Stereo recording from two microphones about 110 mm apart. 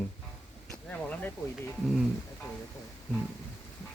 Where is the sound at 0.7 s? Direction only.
15° left (ahead or behind).